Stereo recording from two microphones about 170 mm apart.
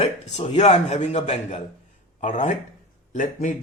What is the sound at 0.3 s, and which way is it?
A man's voice, 40° left (ahead or behind).